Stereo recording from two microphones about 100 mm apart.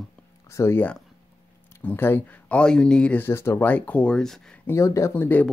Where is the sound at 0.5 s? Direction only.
25° left (ahead or behind).